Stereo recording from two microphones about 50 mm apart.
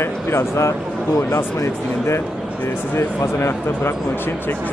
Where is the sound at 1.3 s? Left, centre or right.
Left.